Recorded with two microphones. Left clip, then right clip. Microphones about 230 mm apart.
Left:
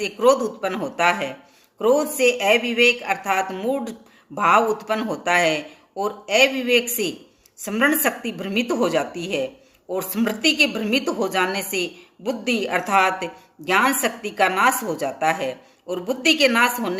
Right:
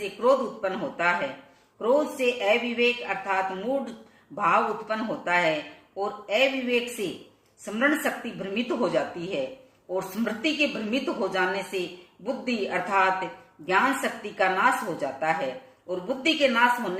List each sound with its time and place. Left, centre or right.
0.0 s a man's voice: left